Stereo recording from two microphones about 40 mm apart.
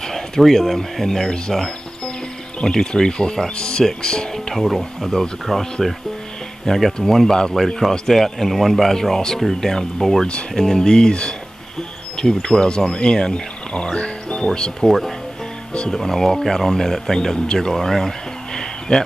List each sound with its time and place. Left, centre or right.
0.0 s speech: centre
2.6 s speech: centre
4.6 s speech: centre
14.9 s speech: centre